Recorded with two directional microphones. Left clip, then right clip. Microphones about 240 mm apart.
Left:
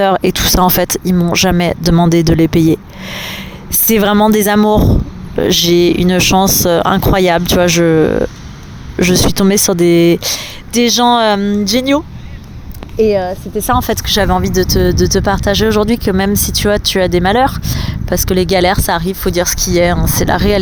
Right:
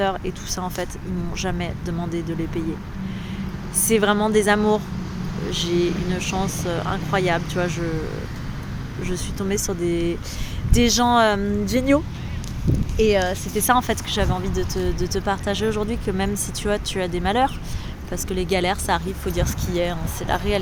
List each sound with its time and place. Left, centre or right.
0.0 s speech: left
9.0 s speech: left
13.0 s speech: left